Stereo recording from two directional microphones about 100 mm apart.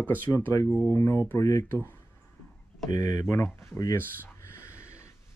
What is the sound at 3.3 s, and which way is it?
Speech, 25° left (ahead or behind).